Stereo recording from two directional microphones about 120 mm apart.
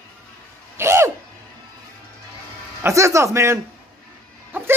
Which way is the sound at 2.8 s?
25° right (ahead or behind).